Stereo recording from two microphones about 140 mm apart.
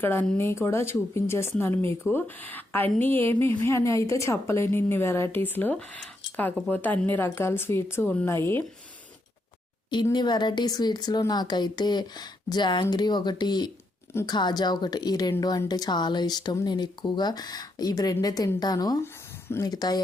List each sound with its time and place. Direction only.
0.0 s a woman's voice: 15° left (ahead or behind)
9.9 s a woman's voice: 30° left (ahead or behind)
19.0 s a sound: 15° left (ahead or behind)
19.6 s speech: 30° left (ahead or behind)